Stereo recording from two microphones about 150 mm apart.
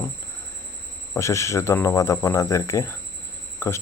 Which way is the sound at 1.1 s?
20° left (ahead or behind).